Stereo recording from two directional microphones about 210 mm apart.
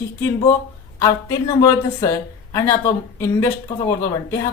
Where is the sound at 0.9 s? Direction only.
15° left (ahead or behind).